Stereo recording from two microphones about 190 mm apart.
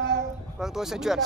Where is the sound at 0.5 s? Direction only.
Centre (ahead or behind).